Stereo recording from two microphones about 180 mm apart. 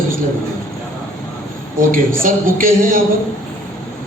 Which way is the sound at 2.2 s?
50° right (ahead or behind).